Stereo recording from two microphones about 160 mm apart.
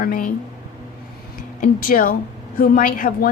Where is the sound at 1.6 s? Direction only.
60° left (ahead or behind).